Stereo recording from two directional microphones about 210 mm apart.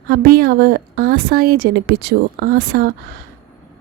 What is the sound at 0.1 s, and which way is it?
A woman's voice, 45° right (ahead or behind).